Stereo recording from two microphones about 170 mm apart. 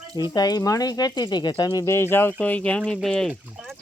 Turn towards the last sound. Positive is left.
turn(degrees=-5)  # may be behind; listen again after turning